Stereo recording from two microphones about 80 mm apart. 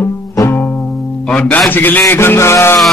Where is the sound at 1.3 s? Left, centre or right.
Centre; by 2.8 s left.